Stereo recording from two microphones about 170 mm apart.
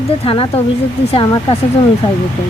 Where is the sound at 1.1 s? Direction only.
30° left (ahead or behind).